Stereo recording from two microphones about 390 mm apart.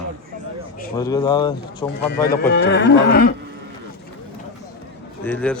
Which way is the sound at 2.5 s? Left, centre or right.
Left.